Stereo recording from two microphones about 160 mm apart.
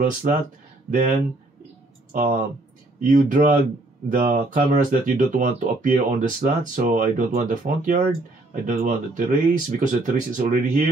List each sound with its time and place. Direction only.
0.0 s speech: 60° right (ahead or behind)
2.1 s speech: 60° right (ahead or behind)